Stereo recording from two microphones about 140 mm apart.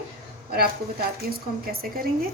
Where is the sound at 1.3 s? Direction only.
90° right.